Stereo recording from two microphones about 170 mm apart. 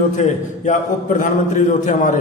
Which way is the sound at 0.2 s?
45° left (ahead or behind).